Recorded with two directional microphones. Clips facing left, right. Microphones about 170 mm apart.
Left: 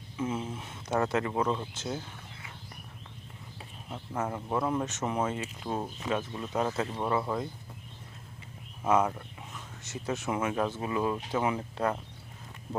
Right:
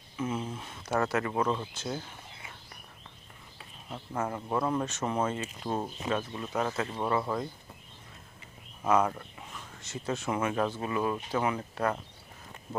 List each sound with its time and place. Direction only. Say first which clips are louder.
0.3 s a sound: right 1 dB; 5° left (ahead or behind)
0.6 s speech: left 1 dB; 20° left (ahead or behind)
3.8 s speech: even; 5° left (ahead or behind)
4.7 s speech: even; 15° left (ahead or behind)
6.7 s speech: even; 5° left (ahead or behind)
9.0 s a sound: even; 5° left (ahead or behind)
9.8 s speech: even; 15° left (ahead or behind)